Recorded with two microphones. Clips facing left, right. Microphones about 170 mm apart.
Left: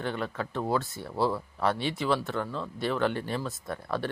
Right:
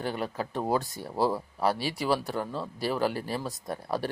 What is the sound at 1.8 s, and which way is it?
Speech, 10° right (ahead or behind).